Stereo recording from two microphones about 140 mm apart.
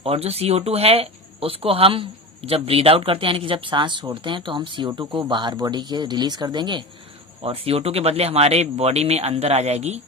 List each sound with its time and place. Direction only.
0.0 s speech: 45° right (ahead or behind)
7.4 s speech: 45° right (ahead or behind)